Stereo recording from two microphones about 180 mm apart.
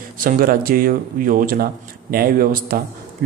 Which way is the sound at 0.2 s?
55° right (ahead or behind).